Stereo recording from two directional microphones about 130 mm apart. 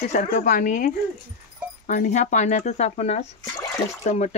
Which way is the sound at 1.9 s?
75° left (ahead or behind).